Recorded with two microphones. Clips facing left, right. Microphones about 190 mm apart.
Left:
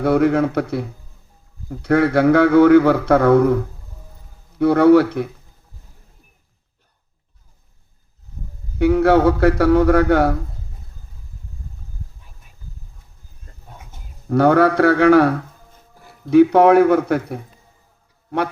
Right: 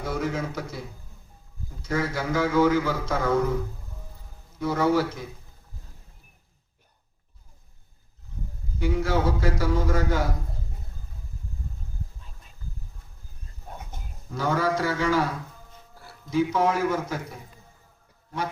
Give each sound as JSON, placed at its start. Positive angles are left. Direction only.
{"t": 0.0, "sound": "a man's voice", "side_deg": 65}
{"t": 8.8, "sound": "a man's voice", "side_deg": 65}
{"t": 14.3, "sound": "a man's voice", "side_deg": 65}